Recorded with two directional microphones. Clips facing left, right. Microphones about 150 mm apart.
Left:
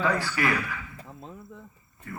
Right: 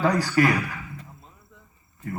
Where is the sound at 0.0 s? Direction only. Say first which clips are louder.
Right 5 dB; 40° right (ahead or behind).